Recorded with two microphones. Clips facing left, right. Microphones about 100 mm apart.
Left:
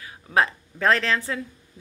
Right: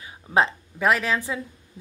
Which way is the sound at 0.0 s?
25° right (ahead or behind).